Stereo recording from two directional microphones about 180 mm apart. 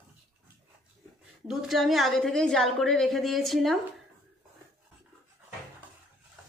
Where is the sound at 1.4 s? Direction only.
Centre (ahead or behind).